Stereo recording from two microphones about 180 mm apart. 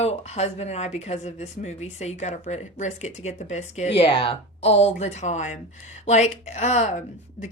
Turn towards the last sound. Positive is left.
turn(degrees=40)  # may be behind; listen again after turning